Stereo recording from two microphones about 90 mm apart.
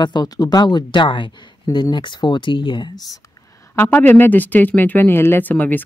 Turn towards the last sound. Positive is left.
turn(degrees=20)  # may be behind; listen again after turning